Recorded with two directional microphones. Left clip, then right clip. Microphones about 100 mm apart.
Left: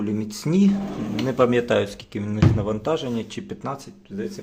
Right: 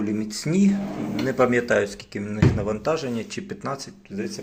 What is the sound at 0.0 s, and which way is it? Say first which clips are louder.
Speech: even; 80° left.